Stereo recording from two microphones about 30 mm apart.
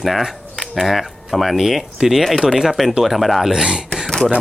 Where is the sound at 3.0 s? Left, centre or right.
Centre.